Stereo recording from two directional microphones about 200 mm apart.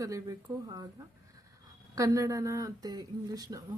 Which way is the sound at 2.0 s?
15° right (ahead or behind).